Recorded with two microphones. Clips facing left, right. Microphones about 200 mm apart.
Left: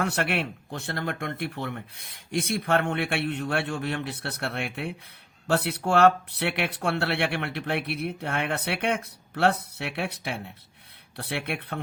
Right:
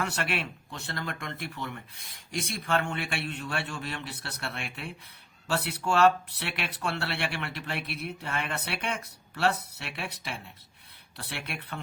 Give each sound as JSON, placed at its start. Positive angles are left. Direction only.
{"t": 0.0, "sound": "speech", "side_deg": 55}